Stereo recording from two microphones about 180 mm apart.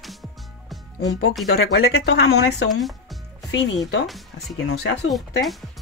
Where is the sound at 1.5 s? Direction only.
90° left; by 2.7 s 70° left (ahead or behind).